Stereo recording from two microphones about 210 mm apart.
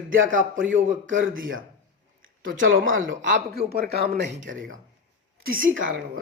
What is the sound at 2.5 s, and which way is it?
Speech, 65° right (ahead or behind).